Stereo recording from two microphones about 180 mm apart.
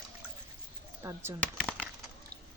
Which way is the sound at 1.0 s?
15° right (ahead or behind).